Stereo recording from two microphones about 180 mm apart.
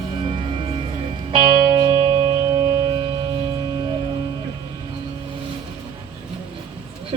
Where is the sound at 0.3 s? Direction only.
30° right (ahead or behind).